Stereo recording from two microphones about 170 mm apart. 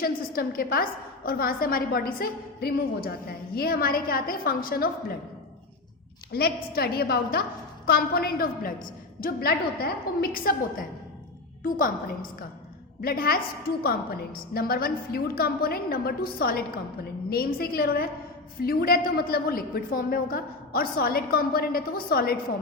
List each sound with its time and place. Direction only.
0.0 s a woman's voice: 60° left (ahead or behind)
6.3 s a woman's voice: 65° left (ahead or behind)